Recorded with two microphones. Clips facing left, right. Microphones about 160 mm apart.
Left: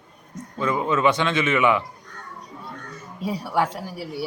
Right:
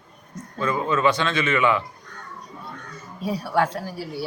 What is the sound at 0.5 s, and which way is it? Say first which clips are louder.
A woman's voice: left 1 dB; 15° left (ahead or behind).